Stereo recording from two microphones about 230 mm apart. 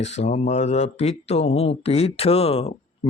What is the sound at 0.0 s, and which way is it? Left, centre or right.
Speech, left.